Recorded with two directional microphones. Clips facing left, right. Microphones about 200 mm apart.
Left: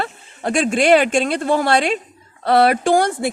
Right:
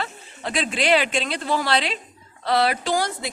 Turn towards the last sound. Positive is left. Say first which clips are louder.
# left 8 dB
turn(degrees=55)  # may be behind; listen again after turning